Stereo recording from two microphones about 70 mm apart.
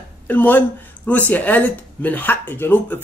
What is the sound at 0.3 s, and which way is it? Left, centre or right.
Speech, left.